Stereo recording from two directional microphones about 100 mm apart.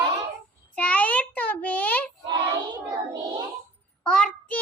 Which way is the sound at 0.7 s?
15° left (ahead or behind).